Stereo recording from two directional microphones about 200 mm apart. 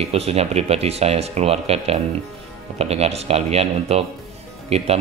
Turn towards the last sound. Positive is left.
turn(degrees=-30)  # may be behind; listen again after turning